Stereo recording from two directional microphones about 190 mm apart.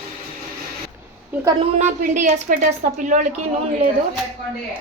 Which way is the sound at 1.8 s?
35° right (ahead or behind).